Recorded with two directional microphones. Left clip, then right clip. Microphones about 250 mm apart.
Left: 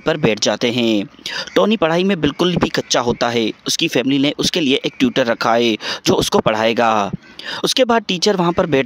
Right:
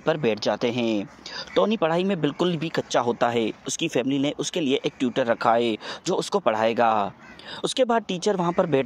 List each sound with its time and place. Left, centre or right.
0.0 s speech: left